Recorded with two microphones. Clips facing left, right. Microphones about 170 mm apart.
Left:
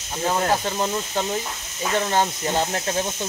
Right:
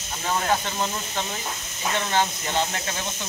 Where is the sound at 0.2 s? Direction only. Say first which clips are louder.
Left 3 dB; 35° left (ahead or behind).